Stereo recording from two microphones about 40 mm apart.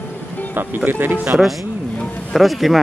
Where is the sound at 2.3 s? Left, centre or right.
Centre.